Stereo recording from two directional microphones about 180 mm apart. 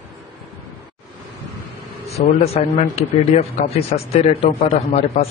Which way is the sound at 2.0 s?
35° left (ahead or behind).